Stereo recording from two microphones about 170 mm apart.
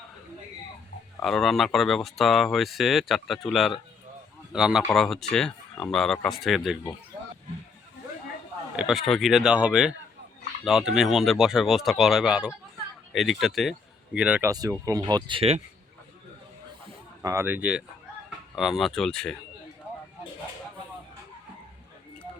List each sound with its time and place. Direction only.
1.2 s speech: centre (ahead or behind)
8.7 s speech: 5° right (ahead or behind)
14.5 s speech: 20° right (ahead or behind); by 15.6 s 35° right (ahead or behind)
17.2 s speech: 15° right (ahead or behind); by 19.4 s 5° left (ahead or behind)